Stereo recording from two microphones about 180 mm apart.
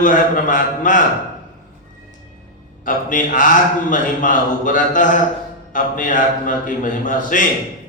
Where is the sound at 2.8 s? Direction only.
45° left (ahead or behind).